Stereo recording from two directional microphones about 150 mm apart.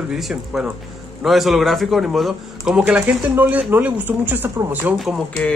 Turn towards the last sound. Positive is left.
turn(degrees=5)  # may be behind; listen again after turning